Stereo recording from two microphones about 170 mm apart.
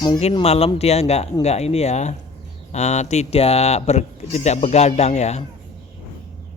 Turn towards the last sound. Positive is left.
turn(degrees=40)  # may be behind; listen again after turning